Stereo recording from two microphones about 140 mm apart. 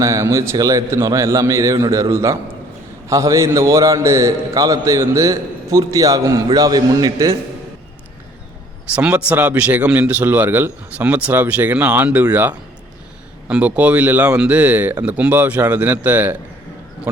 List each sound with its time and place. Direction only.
0.0 s a man's voice: 20° right (ahead or behind)
9.0 s a man's voice: 10° right (ahead or behind)